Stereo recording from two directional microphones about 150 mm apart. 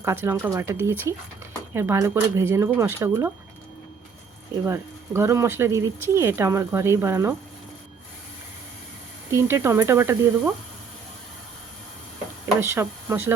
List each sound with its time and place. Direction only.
0.0 s speech: 15° right (ahead or behind)
4.6 s speech: 15° right (ahead or behind)
9.3 s speech: 15° right (ahead or behind)
12.5 s speech: 15° right (ahead or behind)